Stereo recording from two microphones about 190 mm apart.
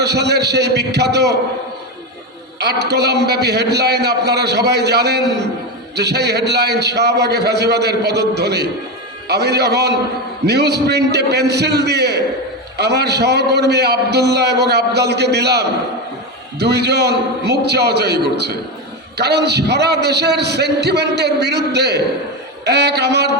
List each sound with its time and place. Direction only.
0.0 s a man's voice: 60° right (ahead or behind)
2.6 s a man's voice: 60° right (ahead or behind)